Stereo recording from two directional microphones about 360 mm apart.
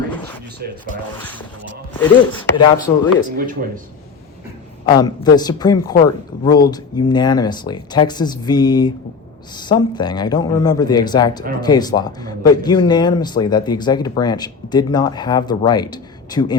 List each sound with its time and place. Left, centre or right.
0.6 s speech: right
1.2 s chopping: centre
3.3 s speech: right
4.9 s speech: centre